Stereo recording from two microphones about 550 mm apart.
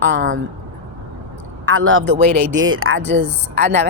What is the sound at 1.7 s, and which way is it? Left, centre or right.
Speech, right.